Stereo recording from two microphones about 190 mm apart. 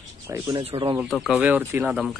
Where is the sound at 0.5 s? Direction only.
30° right (ahead or behind).